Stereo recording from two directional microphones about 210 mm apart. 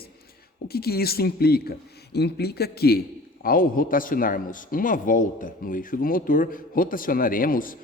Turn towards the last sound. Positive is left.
turn(degrees=40)  # may be behind; listen again after turning